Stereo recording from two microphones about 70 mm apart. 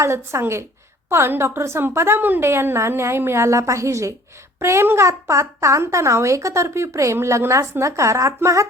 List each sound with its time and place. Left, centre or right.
0.0 s a woman's voice: right